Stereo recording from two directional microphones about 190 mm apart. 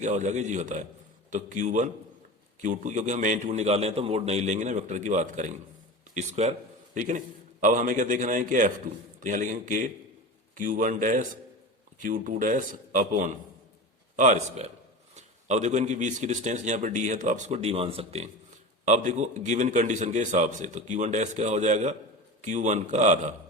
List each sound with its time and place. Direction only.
0.0 s a man's voice: 40° right (ahead or behind)